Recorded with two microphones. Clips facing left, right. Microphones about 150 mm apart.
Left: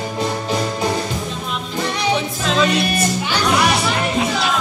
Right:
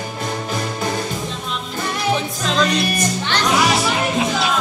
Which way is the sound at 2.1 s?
Centre (ahead or behind).